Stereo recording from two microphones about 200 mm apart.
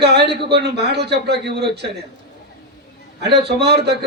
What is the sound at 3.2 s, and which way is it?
Speech, 55° right (ahead or behind).